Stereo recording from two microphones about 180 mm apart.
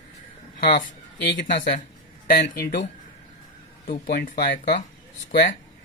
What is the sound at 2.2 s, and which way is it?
Speech, 60° left (ahead or behind).